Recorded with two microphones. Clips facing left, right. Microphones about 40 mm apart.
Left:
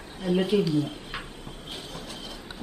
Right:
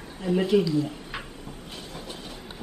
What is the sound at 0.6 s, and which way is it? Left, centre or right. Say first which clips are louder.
Speech: even; left.